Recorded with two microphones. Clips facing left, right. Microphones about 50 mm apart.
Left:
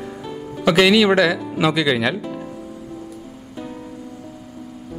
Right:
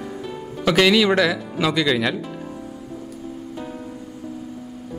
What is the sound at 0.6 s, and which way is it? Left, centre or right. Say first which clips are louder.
Speech: left 2 dB; centre.